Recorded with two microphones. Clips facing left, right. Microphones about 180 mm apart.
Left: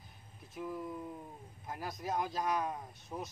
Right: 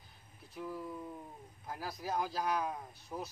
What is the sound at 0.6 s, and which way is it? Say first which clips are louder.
Speech: left 1 dB; centre (ahead or behind).